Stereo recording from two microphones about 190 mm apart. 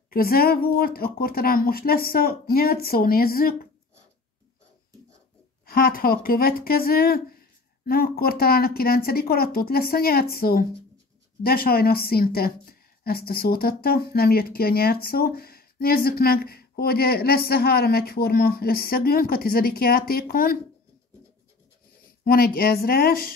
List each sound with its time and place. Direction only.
0.1 s speech: 50° left (ahead or behind)
5.7 s speech: 50° left (ahead or behind)
22.2 s speech: 50° left (ahead or behind)